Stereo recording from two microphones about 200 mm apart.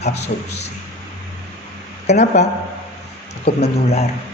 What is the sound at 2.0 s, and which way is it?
Speech, 35° left (ahead or behind).